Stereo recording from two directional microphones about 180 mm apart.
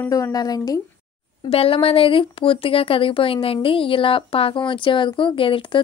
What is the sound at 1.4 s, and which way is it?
A woman's voice, 30° left (ahead or behind).